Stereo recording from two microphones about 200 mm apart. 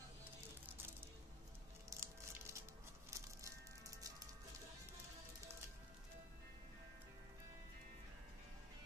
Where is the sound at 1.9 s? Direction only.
15° right (ahead or behind).